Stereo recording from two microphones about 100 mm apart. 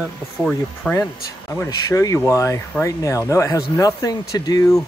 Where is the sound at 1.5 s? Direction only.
35° left (ahead or behind).